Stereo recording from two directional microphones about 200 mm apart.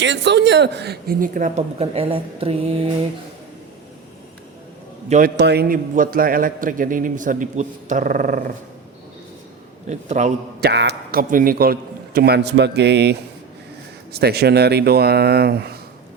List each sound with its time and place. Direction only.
0.0 s a man's voice: 60° right (ahead or behind); by 2.9 s 30° right (ahead or behind)
5.0 s a man's voice: 35° right (ahead or behind)
5.4 s a man's voice: 55° right (ahead or behind)
9.9 s a man's voice: 35° right (ahead or behind)
10.6 s a man's voice: 55° right (ahead or behind)